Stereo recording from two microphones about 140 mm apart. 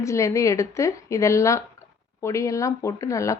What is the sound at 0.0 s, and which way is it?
Speech, 20° left (ahead or behind).